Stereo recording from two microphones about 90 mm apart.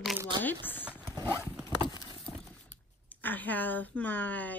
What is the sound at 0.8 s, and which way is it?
Clip-clop, 15° right (ahead or behind).